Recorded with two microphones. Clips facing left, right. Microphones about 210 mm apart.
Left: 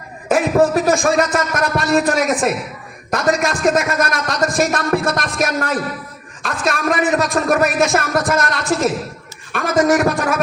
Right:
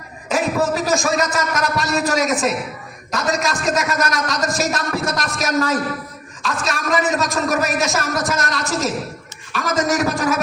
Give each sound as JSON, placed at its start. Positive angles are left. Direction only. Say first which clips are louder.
{"t": 0.3, "sound": "a man's voice", "louder": "left 5 dB", "side_deg": 55}